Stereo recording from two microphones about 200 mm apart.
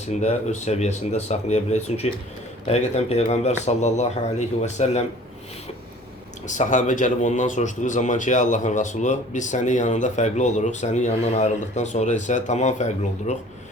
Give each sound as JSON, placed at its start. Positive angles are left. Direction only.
{"t": 0.1, "sound": "speech", "side_deg": 35}
{"t": 6.5, "sound": "speech", "side_deg": 40}